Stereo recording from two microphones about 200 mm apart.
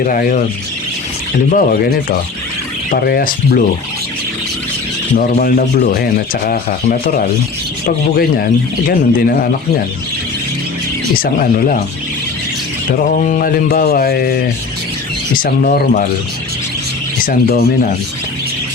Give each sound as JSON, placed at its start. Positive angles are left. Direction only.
{"t": 0.0, "sound": "rub", "side_deg": 45}
{"t": 1.5, "sound": "rub", "side_deg": 45}
{"t": 5.1, "sound": "rub", "side_deg": 45}
{"t": 11.2, "sound": "rub", "side_deg": 45}
{"t": 13.1, "sound": "rub", "side_deg": 40}
{"t": 15.4, "sound": "rub", "side_deg": 50}
{"t": 17.2, "sound": "rub", "side_deg": 45}